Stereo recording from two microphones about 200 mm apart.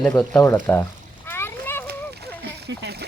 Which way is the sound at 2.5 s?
55° right (ahead or behind).